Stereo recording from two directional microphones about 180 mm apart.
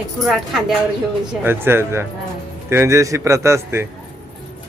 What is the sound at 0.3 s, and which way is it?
Speech, centre (ahead or behind).